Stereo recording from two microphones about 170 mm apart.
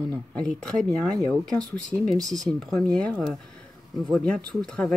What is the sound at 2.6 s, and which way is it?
Speech, 5° left (ahead or behind).